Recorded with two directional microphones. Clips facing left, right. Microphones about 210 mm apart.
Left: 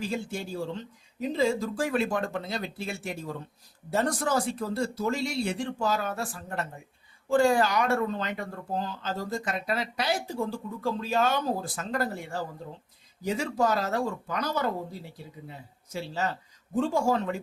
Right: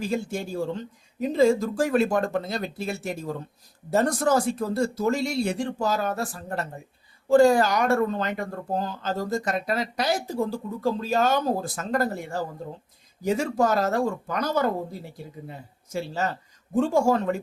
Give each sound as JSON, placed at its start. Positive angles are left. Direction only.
{"t": 0.0, "sound": "speech", "side_deg": -45}